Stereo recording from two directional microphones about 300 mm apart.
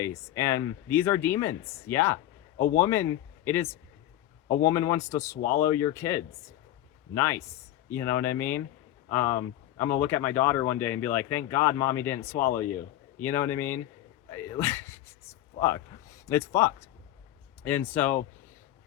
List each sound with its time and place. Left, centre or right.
0.0 s speech: centre
14.3 s a sound: centre
16.2 s speech: centre